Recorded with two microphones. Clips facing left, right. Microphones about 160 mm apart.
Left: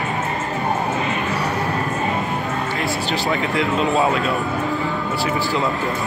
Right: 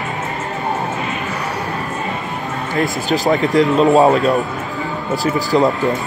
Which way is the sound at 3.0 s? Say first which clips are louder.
Right 8 dB; 40° right (ahead or behind).